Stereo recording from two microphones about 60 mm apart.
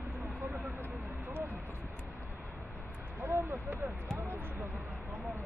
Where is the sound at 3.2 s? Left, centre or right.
Right.